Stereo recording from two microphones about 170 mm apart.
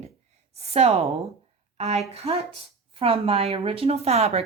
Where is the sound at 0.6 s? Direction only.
35° right (ahead or behind).